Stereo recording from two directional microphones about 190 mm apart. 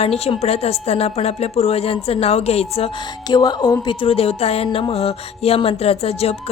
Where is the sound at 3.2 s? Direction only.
20° left (ahead or behind).